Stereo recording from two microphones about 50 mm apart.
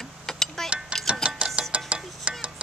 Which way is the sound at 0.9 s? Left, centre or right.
Right.